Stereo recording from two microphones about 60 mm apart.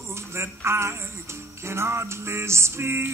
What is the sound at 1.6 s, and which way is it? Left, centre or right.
Male singing, right.